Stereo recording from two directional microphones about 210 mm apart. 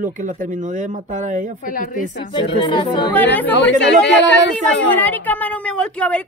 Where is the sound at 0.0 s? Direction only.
40° right (ahead or behind).